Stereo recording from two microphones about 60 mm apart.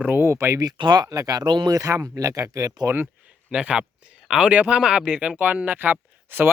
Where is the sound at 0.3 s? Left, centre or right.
Right.